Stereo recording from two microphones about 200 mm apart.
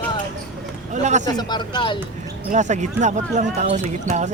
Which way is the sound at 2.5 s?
35° right (ahead or behind).